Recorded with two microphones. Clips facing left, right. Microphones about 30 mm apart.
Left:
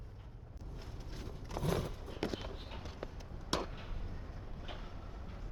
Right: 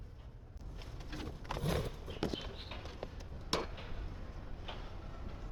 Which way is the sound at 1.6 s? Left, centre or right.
Right.